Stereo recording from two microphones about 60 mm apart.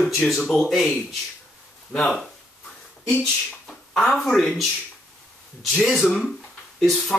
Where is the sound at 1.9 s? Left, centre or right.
Centre.